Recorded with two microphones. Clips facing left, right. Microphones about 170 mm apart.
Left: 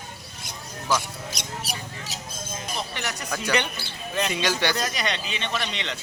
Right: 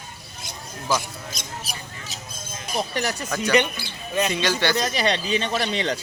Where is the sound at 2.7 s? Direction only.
40° right (ahead or behind).